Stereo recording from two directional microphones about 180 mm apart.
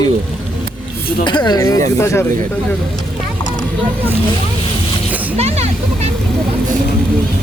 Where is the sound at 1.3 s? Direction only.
25° left (ahead or behind).